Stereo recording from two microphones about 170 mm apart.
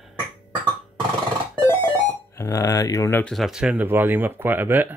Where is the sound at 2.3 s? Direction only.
20° left (ahead or behind).